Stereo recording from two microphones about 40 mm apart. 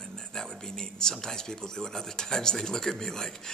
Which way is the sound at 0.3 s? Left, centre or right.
Centre.